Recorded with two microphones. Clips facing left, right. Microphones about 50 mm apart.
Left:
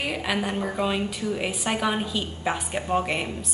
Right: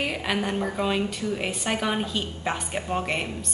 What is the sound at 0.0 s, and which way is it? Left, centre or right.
A woman's voice, centre.